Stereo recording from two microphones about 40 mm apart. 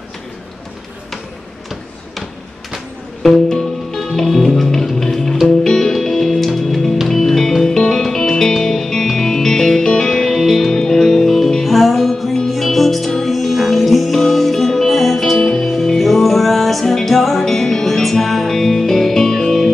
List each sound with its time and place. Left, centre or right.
3.2 s music: centre